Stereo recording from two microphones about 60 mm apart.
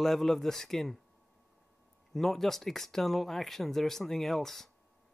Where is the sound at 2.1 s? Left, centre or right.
Centre.